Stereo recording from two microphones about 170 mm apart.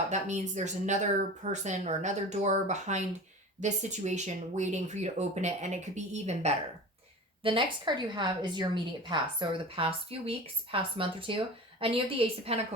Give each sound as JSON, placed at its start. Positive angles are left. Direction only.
{"t": 0.1, "sound": "speech", "side_deg": -45}
{"t": 7.4, "sound": "a woman's voice", "side_deg": -30}